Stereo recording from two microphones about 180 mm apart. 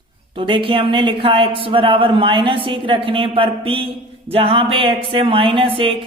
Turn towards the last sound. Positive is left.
turn(degrees=-30)  # may be behind; listen again after turning